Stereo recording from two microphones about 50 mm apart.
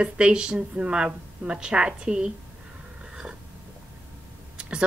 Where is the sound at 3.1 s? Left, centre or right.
Centre.